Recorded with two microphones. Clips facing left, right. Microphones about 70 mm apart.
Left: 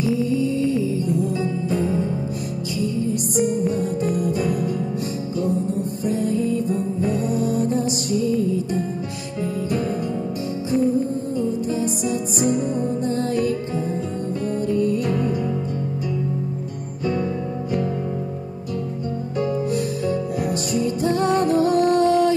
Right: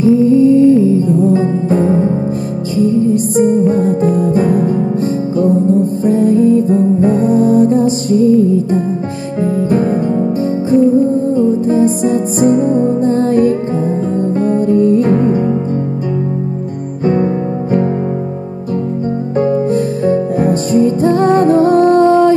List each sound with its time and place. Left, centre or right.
0.0 s music: right
17.0 s music: right
19.3 s music: right